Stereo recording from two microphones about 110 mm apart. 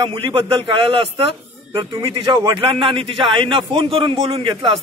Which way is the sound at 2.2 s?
45° right (ahead or behind).